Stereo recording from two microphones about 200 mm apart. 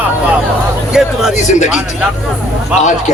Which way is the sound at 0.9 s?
5° right (ahead or behind).